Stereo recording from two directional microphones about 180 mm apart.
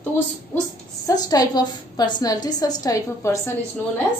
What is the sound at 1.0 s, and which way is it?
A woman's voice, 20° left (ahead or behind).